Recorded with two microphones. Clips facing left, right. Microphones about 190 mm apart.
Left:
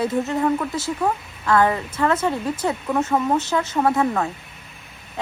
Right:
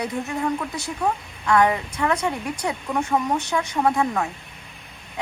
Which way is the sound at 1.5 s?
15° right (ahead or behind).